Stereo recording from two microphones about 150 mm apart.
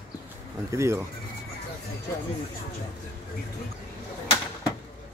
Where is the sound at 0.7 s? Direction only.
20° right (ahead or behind).